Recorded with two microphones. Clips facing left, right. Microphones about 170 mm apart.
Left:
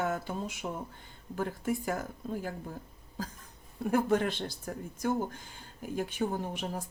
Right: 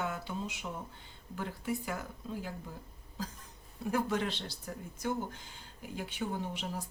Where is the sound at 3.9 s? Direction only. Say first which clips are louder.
Left 5 dB; 50° left (ahead or behind).